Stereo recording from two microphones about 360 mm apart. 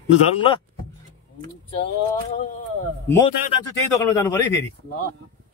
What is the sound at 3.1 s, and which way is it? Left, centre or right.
Speech, centre.